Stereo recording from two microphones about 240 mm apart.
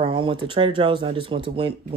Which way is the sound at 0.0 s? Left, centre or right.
Right.